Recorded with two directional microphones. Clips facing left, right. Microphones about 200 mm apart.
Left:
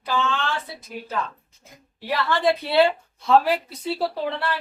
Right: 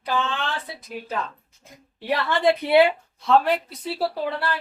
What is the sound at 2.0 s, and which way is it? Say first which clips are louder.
Speech: right 1 dB; 20° right (ahead or behind).